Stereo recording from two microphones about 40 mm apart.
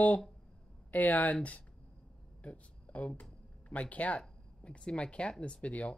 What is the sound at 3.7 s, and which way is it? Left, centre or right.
Speech, left.